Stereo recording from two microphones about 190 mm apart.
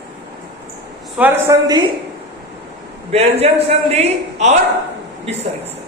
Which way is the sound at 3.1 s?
35° right (ahead or behind).